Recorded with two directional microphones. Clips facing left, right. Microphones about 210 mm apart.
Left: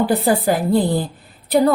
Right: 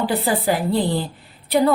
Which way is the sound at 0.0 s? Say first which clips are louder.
Left 4 dB; 45° left (ahead or behind).